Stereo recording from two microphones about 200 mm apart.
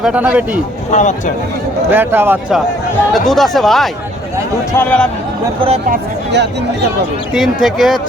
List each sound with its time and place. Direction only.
0.0 s a man's voice: 5° right (ahead or behind)
0.9 s speech: 35° left (ahead or behind)
1.9 s a man's voice: 10° right (ahead or behind)
3.1 s speech: centre (ahead or behind)
5.5 s speech: 30° right (ahead or behind)
5.9 s speech: 60° right (ahead or behind)
7.3 s speech: centre (ahead or behind)